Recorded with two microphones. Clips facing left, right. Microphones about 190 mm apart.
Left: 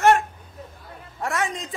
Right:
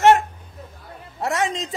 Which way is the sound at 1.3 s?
85° right.